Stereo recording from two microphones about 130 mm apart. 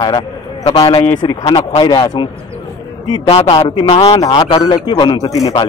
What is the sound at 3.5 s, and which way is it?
A man's voice, 40° left (ahead or behind).